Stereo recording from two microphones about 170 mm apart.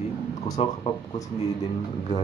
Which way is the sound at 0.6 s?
35° left (ahead or behind).